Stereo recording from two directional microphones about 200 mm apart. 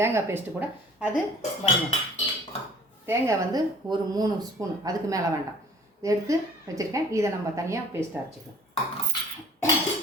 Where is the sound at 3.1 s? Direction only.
15° right (ahead or behind).